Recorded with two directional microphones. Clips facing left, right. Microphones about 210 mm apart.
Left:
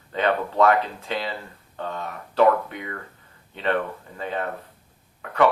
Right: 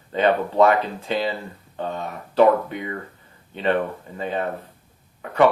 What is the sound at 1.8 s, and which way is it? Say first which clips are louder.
Speech: right 3 dB; 20° right (ahead or behind).